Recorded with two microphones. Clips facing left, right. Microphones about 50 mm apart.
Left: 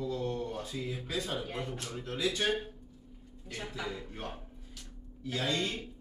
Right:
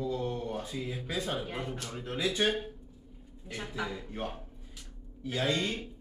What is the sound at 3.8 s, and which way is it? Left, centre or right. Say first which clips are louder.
Speech: right 1 dB; centre.